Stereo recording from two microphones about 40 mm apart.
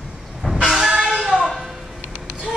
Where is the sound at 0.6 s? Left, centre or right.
Centre.